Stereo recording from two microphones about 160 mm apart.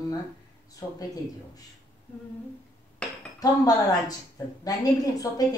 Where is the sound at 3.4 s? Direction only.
25° left (ahead or behind).